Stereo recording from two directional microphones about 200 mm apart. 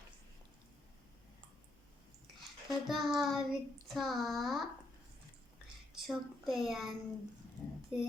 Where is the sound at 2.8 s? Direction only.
Centre (ahead or behind).